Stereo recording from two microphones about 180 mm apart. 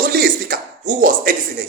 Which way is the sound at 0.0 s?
55° right (ahead or behind).